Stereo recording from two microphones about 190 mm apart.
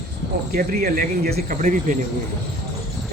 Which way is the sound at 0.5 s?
50° right (ahead or behind).